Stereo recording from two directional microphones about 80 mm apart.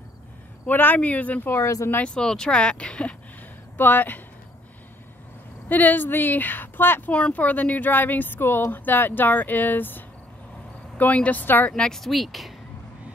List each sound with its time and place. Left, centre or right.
0.7 s speech: left
2.0 s speech: centre
3.7 s speech: left
5.7 s speech: left
11.7 s speech: centre